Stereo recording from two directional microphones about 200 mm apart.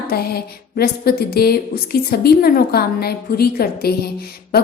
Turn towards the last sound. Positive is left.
turn(degrees=50)  # may be behind; listen again after turning